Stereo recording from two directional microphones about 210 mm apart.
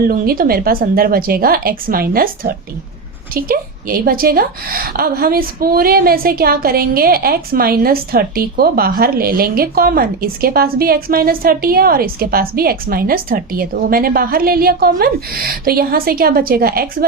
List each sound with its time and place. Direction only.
0.1 s a woman's voice: 45° right (ahead or behind)